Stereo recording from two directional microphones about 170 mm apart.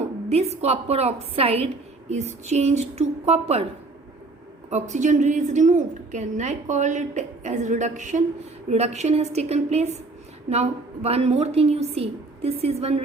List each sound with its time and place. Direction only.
0.3 s a woman's voice: 40° right (ahead or behind)
4.7 s a woman's voice: 45° right (ahead or behind)